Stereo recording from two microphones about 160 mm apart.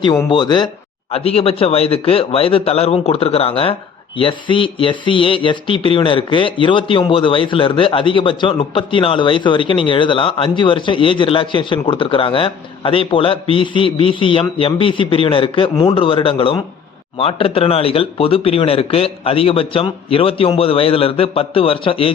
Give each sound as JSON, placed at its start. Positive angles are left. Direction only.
{"t": 0.0, "sound": "speech", "side_deg": 25}
{"t": 1.1, "sound": "speech", "side_deg": 40}